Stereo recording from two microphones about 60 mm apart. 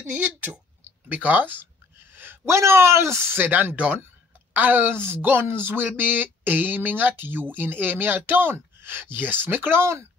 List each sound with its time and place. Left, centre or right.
0.0 s speech: right
2.1 s a sound: right
2.5 s speech: right
3.3 s speech: right
3.7 s speech: right